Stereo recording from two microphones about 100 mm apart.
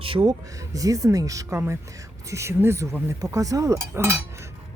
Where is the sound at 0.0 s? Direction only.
60° right (ahead or behind).